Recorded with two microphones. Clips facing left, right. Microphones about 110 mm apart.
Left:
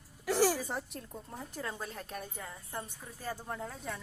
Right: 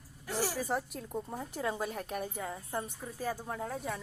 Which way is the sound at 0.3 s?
90° left.